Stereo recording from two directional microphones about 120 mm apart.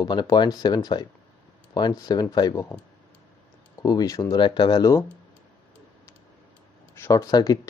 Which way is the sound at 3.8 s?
30° left (ahead or behind).